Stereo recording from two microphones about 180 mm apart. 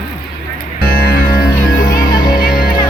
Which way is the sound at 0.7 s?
55° left (ahead or behind).